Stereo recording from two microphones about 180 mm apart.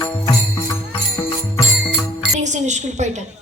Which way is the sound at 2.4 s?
40° right (ahead or behind).